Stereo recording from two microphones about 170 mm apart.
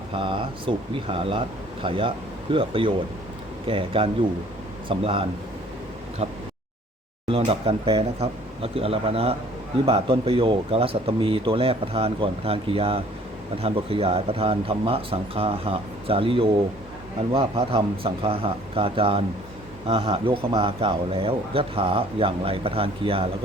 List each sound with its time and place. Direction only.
0.1 s speech: 30° right (ahead or behind)
7.3 s speech: 35° right (ahead or behind)